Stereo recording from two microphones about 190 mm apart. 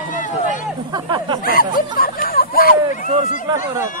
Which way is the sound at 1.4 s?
50° left (ahead or behind).